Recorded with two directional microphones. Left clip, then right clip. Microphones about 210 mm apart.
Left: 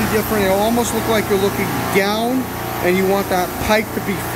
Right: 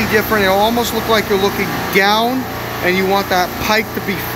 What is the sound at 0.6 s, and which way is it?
Speech, 10° left (ahead or behind).